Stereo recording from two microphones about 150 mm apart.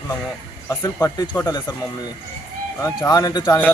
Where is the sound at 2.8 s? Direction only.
20° left (ahead or behind).